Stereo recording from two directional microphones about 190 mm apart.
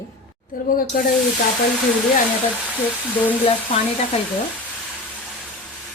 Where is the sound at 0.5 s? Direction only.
50° left (ahead or behind).